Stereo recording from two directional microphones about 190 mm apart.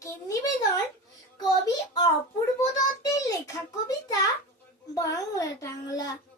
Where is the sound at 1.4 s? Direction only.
20° left (ahead or behind).